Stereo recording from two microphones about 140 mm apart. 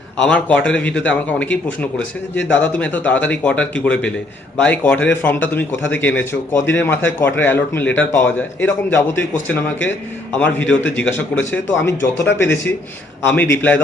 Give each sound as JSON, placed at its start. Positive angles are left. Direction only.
{"t": 0.2, "sound": "a man's voice", "side_deg": 10}